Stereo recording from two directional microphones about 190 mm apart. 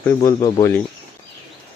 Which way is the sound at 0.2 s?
20° left (ahead or behind).